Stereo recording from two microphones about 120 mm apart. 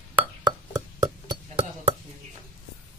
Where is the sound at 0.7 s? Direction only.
30° right (ahead or behind).